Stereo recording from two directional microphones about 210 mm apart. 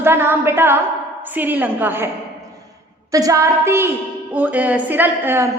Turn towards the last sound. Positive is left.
turn(degrees=-10)  # may be behind; listen again after turning